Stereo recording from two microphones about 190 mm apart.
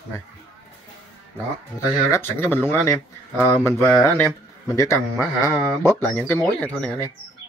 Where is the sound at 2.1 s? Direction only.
10° left (ahead or behind).